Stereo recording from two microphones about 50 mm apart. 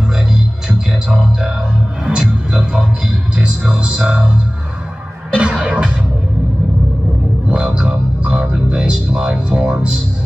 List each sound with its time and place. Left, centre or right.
0.7 s a sound: centre
2.0 s speech: centre
5.4 s music: right
7.4 s music: right